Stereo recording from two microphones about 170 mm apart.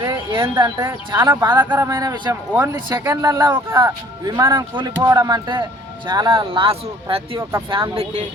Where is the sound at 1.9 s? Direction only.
25° right (ahead or behind).